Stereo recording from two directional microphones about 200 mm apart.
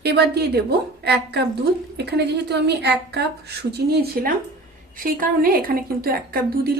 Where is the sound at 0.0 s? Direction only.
55° right (ahead or behind).